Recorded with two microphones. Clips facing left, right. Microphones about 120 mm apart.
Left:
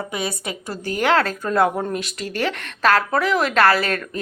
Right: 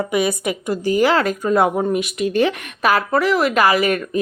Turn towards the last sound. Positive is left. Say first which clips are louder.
# right 3 dB
turn(degrees=-15)  # may be behind; listen again after turning